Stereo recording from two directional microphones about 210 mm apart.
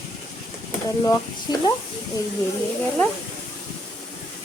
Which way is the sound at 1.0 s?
20° left (ahead or behind).